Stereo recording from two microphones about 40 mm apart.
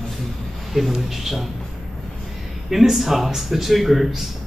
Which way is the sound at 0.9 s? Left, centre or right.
Centre.